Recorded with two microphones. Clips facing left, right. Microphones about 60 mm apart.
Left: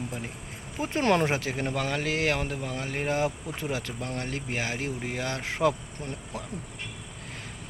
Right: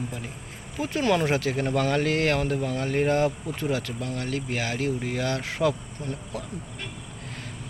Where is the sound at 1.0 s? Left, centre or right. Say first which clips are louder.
Even; left.